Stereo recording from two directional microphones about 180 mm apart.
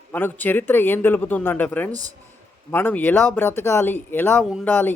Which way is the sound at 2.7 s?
10° left (ahead or behind).